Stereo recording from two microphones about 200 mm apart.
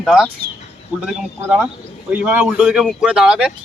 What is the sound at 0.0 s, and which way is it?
Speech, centre (ahead or behind).